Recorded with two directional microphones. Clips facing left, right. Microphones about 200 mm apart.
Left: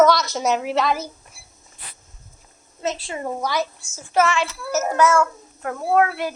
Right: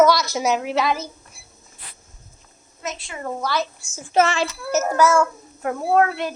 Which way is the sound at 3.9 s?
20° right (ahead or behind).